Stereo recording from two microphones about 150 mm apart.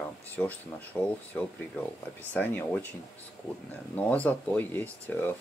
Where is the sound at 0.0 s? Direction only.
10° left (ahead or behind).